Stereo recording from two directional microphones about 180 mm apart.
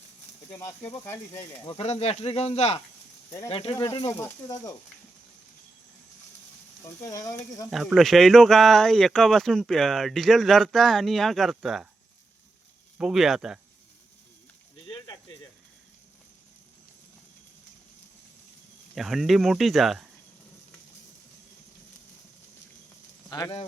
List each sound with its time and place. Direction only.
0.9 s speech: 10° left (ahead or behind)
1.6 s speech: 35° left (ahead or behind)
6.8 s speech: 15° left (ahead or behind)
7.7 s speech: centre (ahead or behind)
13.0 s speech: 5° right (ahead or behind)
14.8 s cricket: 25° left (ahead or behind)
18.9 s speech: centre (ahead or behind)